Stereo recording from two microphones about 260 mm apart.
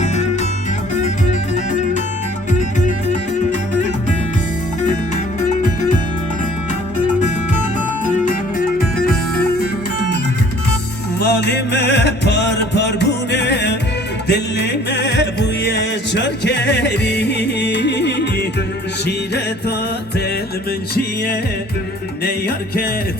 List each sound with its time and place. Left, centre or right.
0.9 s music: left
5.4 s music: left
8.2 s music: left
11.2 s music: left
22.2 s music: left